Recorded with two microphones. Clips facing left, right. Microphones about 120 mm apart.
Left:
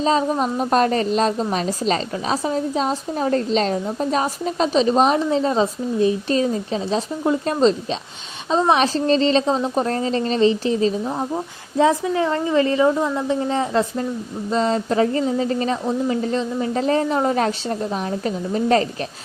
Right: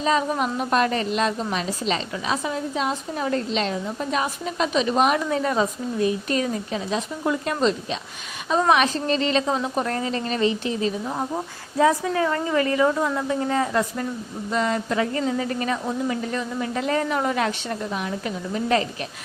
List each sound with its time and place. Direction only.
0.0 s a woman's voice: 30° left (ahead or behind)